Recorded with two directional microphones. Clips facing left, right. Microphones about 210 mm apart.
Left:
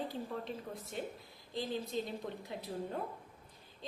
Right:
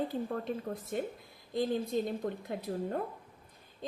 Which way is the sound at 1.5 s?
55° right (ahead or behind).